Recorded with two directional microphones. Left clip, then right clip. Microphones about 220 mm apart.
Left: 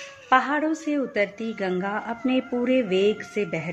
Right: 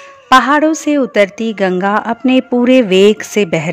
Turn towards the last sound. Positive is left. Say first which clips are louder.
# right 13 dB
turn(degrees=-50)  # may be behind; listen again after turning